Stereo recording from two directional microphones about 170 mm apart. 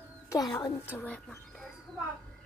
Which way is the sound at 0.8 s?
10° left (ahead or behind).